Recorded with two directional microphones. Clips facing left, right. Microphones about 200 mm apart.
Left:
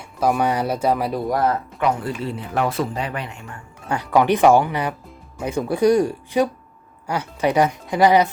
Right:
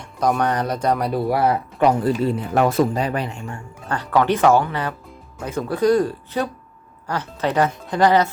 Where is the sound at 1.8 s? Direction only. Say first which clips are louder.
Right 5 dB; 35° right (ahead or behind).